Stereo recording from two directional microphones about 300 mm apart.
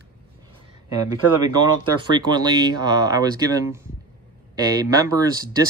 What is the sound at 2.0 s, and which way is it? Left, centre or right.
Speech, centre.